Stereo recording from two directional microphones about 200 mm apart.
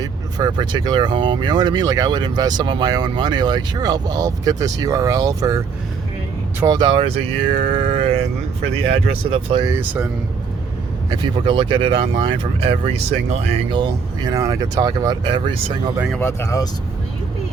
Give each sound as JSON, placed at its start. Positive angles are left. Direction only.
{"t": 0.0, "sound": "speech", "side_deg": -20}
{"t": 11.4, "sound": "speech", "side_deg": -25}
{"t": 16.1, "sound": "speech", "side_deg": 10}